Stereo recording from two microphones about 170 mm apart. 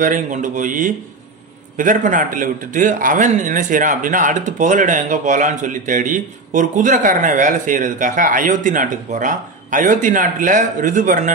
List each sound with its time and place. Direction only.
0.0 s a man's voice: 50° right (ahead or behind)